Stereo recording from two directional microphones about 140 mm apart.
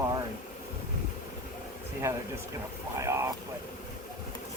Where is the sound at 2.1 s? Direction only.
15° right (ahead or behind).